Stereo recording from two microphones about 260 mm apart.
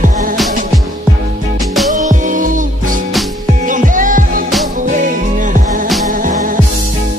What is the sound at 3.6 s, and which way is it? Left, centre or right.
Music, right.